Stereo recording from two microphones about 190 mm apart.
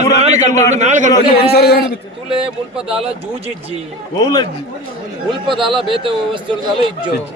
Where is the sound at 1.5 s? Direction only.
55° left (ahead or behind).